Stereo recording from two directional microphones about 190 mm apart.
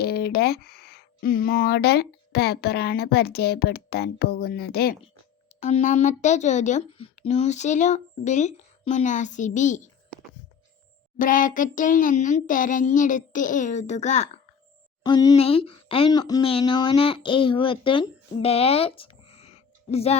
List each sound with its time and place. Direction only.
0.0 s speech: 55° left (ahead or behind)
5.5 s a child's voice: 40° left (ahead or behind)
11.2 s a child's voice: 45° left (ahead or behind)
15.0 s speech: 20° left (ahead or behind)
18.4 s a sound: 30° left (ahead or behind)